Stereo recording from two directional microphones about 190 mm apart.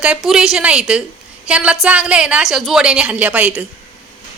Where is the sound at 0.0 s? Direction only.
5° right (ahead or behind).